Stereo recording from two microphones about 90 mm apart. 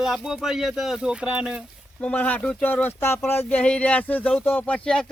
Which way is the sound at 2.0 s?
15° left (ahead or behind).